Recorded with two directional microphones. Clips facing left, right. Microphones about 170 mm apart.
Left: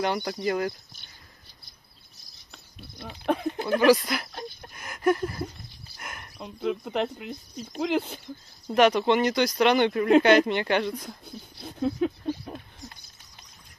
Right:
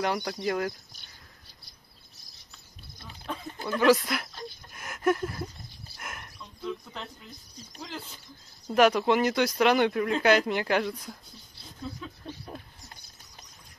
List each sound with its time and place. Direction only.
0.0 s speech: centre (ahead or behind)
2.5 s a sound: 65° left (ahead or behind)
3.8 s speech: centre (ahead or behind)
4.3 s a sound: 70° left (ahead or behind)
4.7 s speech: centre (ahead or behind)
5.9 s a sound: centre (ahead or behind)
6.3 s speech: 70° left (ahead or behind)
8.7 s speech: 5° right (ahead or behind)
11.2 s speech: 65° left (ahead or behind)